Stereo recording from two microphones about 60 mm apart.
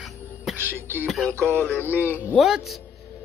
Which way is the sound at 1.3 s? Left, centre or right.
Right.